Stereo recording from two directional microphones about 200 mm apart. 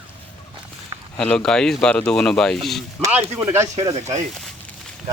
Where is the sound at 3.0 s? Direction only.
15° right (ahead or behind).